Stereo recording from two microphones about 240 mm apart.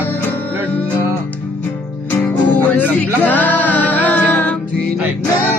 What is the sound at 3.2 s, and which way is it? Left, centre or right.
Music, centre.